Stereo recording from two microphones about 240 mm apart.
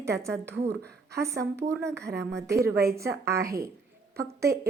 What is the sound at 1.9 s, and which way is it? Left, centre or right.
Speech, right.